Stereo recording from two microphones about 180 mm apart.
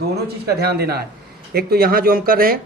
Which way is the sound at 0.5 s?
60° right (ahead or behind).